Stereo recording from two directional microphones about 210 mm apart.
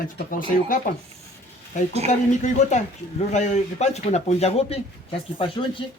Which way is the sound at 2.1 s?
35° left (ahead or behind).